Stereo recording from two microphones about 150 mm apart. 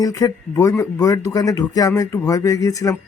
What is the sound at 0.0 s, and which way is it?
Speech, 25° left (ahead or behind).